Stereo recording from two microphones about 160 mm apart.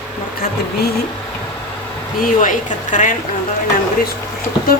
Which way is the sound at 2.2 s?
55° left (ahead or behind).